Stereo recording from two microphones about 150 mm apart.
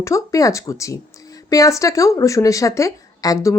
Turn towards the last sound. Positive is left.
turn(degrees=20)  # may be behind; listen again after turning